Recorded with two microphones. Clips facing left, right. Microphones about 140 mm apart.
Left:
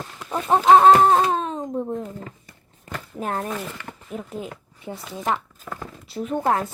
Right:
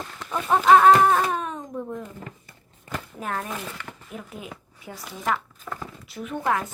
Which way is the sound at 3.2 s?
30° left (ahead or behind).